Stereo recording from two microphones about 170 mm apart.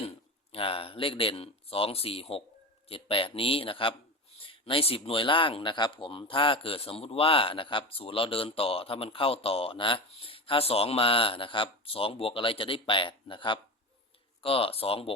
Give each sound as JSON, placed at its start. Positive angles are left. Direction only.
{"t": 0.0, "sound": "speech", "side_deg": 35}